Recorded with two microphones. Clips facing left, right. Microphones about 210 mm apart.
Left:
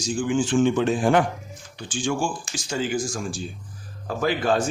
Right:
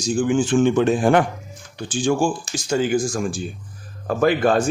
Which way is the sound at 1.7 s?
40° right (ahead or behind).